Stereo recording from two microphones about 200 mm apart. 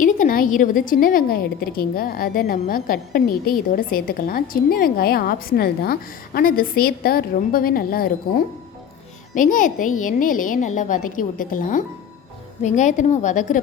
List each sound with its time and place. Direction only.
0.0 s a woman's voice: 45° left (ahead or behind)